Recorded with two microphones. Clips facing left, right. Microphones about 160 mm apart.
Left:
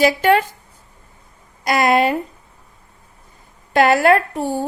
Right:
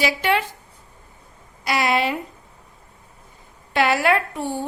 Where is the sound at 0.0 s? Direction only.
45° left (ahead or behind).